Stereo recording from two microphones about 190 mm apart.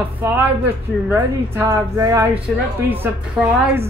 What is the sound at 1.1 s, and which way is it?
Speech, 15° right (ahead or behind).